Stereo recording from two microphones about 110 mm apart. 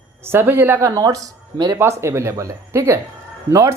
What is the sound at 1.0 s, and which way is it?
Speech, 30° right (ahead or behind).